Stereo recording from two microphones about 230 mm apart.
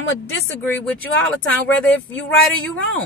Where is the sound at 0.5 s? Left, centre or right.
Centre.